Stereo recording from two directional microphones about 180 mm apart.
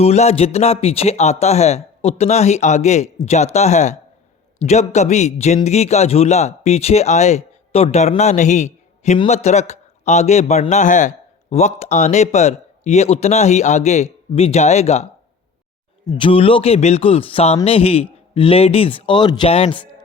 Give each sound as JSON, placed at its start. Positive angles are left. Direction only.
{"t": 0.0, "sound": "a man's voice", "side_deg": 35}
{"t": 16.0, "sound": "a man's voice", "side_deg": 25}